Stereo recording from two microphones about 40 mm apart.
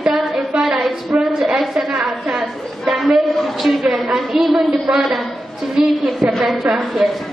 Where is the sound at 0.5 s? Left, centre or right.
Right.